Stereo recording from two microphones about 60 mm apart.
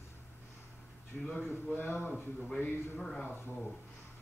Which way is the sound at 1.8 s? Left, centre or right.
Left.